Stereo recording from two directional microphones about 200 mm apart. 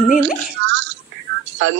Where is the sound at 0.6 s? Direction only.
65° right (ahead or behind).